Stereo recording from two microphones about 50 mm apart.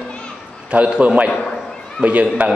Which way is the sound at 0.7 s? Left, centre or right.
Right.